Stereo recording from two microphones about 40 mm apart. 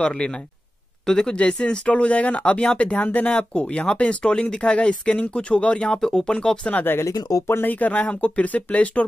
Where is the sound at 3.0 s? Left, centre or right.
Left.